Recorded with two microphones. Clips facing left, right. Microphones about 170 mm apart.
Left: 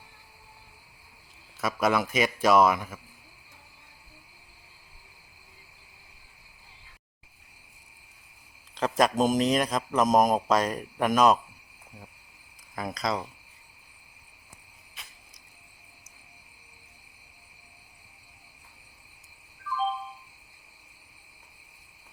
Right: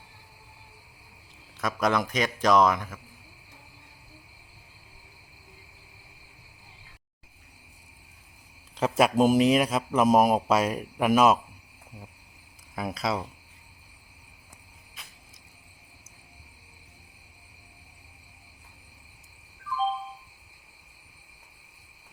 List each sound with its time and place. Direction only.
1.6 s a man's voice: 5° left (ahead or behind)
8.7 s speech: 5° right (ahead or behind)
12.7 s speech: 5° right (ahead or behind)